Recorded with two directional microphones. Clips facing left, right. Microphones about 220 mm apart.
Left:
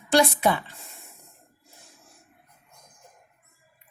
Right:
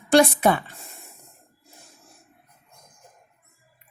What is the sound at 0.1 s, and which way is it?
Speech, 50° right (ahead or behind).